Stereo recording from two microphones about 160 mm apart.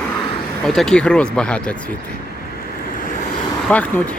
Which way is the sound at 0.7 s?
5° left (ahead or behind).